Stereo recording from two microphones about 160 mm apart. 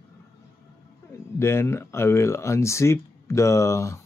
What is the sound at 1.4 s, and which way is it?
Speech, 15° left (ahead or behind).